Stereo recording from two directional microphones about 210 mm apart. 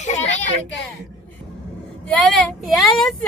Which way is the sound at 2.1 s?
5° left (ahead or behind).